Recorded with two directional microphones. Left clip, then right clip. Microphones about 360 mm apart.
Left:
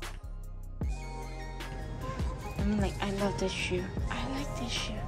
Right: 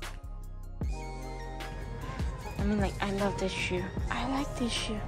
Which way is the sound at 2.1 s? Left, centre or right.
Centre.